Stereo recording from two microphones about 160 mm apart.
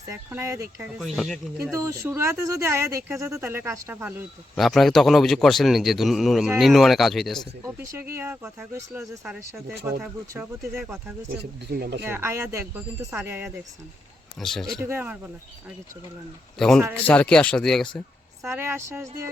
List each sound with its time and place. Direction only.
0.3 s speech: 15° right (ahead or behind)
0.9 s a man's voice: centre (ahead or behind)
1.7 s speech: 20° right (ahead or behind)
4.5 s a man's voice: centre (ahead or behind)
7.6 s speech: 20° right (ahead or behind)
11.7 s speech: 80° right
12.0 s speech: 15° right (ahead or behind)
14.3 s a man's voice: centre (ahead or behind)
14.8 s speech: 15° right (ahead or behind)
16.6 s a man's voice: 5° left (ahead or behind)
18.4 s speech: 15° right (ahead or behind)